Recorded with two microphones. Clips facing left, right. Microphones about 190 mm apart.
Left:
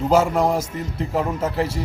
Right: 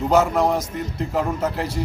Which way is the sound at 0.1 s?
5° left (ahead or behind).